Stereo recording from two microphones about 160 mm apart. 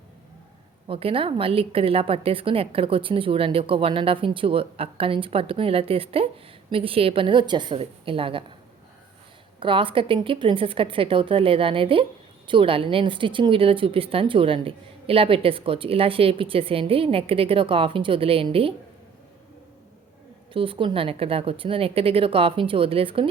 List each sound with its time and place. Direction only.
0.9 s speech: 35° right (ahead or behind)
9.6 s speech: 35° right (ahead or behind)
20.5 s speech: 35° right (ahead or behind)